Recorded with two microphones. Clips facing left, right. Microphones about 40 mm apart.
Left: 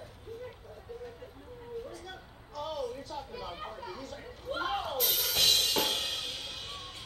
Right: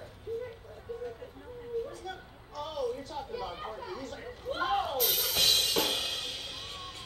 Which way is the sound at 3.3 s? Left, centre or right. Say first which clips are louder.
Right 3 dB; centre.